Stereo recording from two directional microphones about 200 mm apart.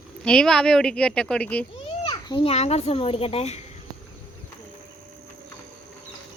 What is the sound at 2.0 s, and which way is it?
A child's voice, 25° left (ahead or behind).